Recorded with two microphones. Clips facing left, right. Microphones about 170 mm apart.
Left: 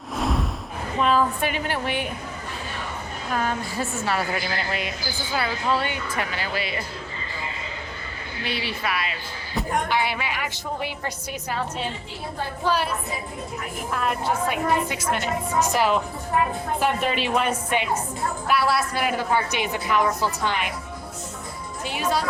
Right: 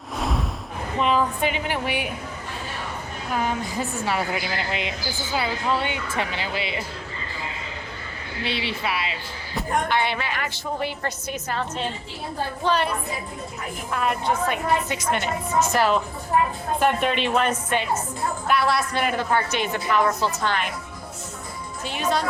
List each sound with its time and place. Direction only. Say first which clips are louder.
0.2 s a sound: left 2 dB; centre (ahead or behind)
0.9 s a woman's voice: left 1 dB; 15° right (ahead or behind)
3.3 s a woman's voice: right 1 dB; 15° right (ahead or behind)
8.4 s a woman's voice: right 1 dB; 25° right (ahead or behind)
9.6 s a woman's voice: right 1 dB; 5° left (ahead or behind)
16.8 s a woman's voice: right 3 dB; centre (ahead or behind)
21.8 s a woman's voice: right 1 dB; 10° left (ahead or behind)